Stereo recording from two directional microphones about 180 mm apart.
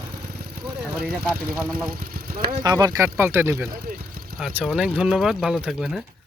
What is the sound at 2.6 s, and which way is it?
Speech, 20° right (ahead or behind).